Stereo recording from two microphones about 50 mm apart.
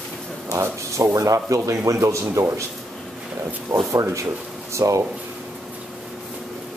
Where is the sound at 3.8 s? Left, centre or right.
Right.